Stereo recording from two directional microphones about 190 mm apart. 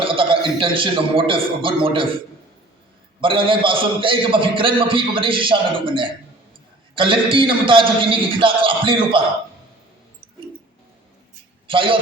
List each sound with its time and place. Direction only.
0.0 s a man's voice: 30° right (ahead or behind)
3.2 s a man's voice: 25° right (ahead or behind)
11.7 s a man's voice: 25° right (ahead or behind)